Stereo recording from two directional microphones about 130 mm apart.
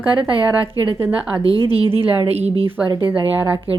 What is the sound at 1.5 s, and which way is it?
Speech, 30° left (ahead or behind).